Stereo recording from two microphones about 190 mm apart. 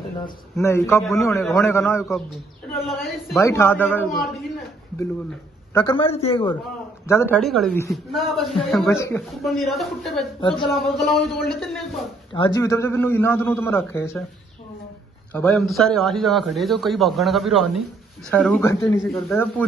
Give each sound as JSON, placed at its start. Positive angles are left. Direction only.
{"t": 0.2, "sound": "a man's voice", "side_deg": 15}
{"t": 2.0, "sound": "a man's voice", "side_deg": 0}
{"t": 3.3, "sound": "a man's voice", "side_deg": 15}
{"t": 5.9, "sound": "a man's voice", "side_deg": 30}
{"t": 7.1, "sound": "a man's voice", "side_deg": 10}
{"t": 8.9, "sound": "a man's voice", "side_deg": 15}
{"t": 9.4, "sound": "a man's voice", "side_deg": 0}
{"t": 10.4, "sound": "a man's voice", "side_deg": 25}
{"t": 10.8, "sound": "a man's voice", "side_deg": 0}
{"t": 12.4, "sound": "a man's voice", "side_deg": 20}
{"t": 15.3, "sound": "a man's voice", "side_deg": 5}